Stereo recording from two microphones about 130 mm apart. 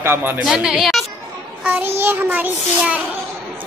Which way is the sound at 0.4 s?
5° right (ahead or behind).